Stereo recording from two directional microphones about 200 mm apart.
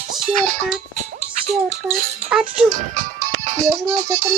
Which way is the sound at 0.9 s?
35° right (ahead or behind).